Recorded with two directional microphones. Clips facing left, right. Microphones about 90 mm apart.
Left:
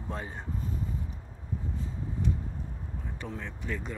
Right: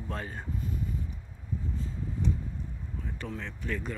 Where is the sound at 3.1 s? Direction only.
15° left (ahead or behind).